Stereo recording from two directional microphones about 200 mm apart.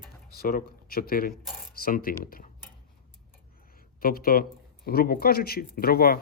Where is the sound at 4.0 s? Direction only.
50° left (ahead or behind).